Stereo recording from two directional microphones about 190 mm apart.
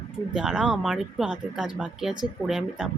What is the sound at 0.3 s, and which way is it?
Speech, 5° right (ahead or behind).